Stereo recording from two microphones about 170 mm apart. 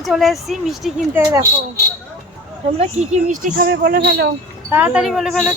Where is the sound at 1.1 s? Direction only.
15° right (ahead or behind).